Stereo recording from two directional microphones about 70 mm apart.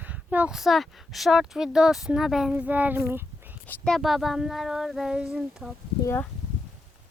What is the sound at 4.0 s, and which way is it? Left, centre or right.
Speech, centre.